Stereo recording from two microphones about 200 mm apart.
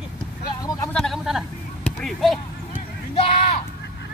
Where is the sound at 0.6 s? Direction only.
15° left (ahead or behind).